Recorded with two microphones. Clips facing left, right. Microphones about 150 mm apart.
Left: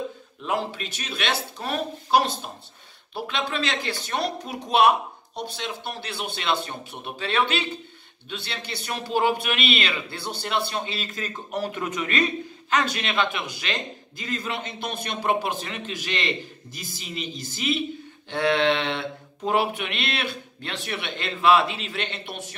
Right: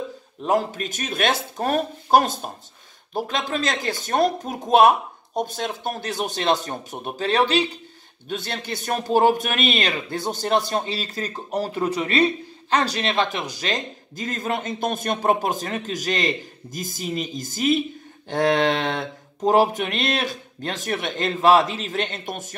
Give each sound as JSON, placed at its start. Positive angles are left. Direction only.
{"t": 0.4, "sound": "a man's voice", "side_deg": -40}